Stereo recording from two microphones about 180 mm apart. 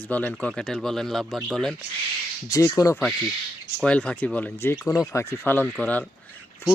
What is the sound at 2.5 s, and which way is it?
Speech, 20° left (ahead or behind).